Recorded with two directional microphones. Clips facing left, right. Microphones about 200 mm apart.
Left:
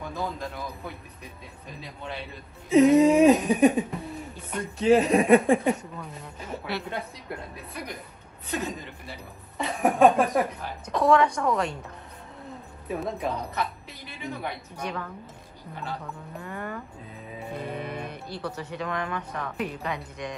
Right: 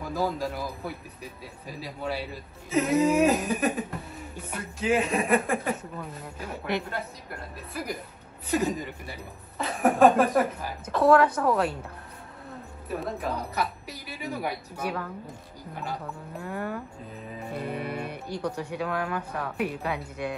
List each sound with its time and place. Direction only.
0.4 s speech: 5° right (ahead or behind)
4.7 s speech: 35° left (ahead or behind)
5.2 s speech: centre (ahead or behind)
13.0 s speech: 5° right (ahead or behind)
16.3 s speech: 5° right (ahead or behind)